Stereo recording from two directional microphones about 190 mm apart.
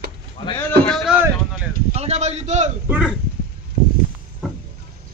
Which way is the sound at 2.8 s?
5° right (ahead or behind).